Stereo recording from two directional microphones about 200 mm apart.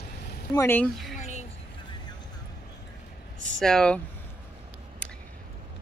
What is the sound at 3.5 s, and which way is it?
Speech, 5° left (ahead or behind).